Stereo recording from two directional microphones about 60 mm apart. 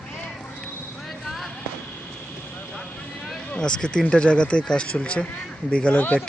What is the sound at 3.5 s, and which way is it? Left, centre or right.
Speech, centre.